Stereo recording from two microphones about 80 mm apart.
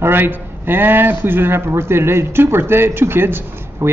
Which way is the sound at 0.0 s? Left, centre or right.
Right.